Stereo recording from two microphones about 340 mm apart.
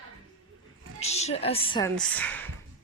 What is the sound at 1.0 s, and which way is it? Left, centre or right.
Speech, centre.